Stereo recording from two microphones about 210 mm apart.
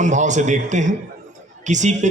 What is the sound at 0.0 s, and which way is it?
A man's voice, 35° right (ahead or behind).